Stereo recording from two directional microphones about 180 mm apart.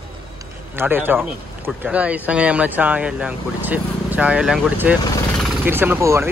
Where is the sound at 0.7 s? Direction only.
10° right (ahead or behind).